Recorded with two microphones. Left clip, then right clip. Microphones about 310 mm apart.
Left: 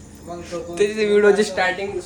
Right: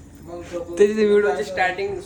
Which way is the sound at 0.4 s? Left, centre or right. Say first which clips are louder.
Right 3 dB; centre.